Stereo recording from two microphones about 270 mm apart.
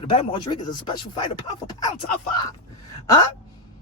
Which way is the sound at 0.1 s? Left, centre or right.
Centre.